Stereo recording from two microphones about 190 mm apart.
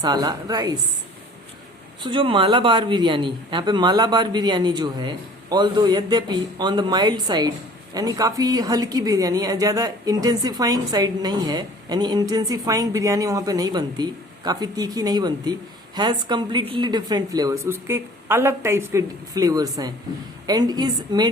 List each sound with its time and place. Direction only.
0.0 s a woman's voice: 20° right (ahead or behind)
2.0 s a woman's voice: 25° right (ahead or behind)